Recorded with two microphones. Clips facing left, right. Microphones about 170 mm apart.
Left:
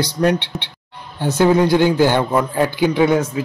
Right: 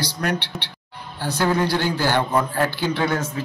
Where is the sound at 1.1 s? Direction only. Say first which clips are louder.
Left 7 dB; 20° left (ahead or behind).